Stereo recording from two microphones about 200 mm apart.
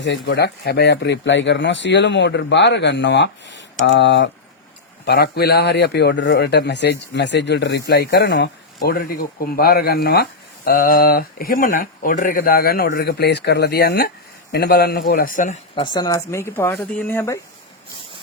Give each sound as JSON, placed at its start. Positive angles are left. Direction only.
{"t": 0.0, "sound": "speech", "side_deg": 60}
{"t": 15.7, "sound": "speech", "side_deg": 25}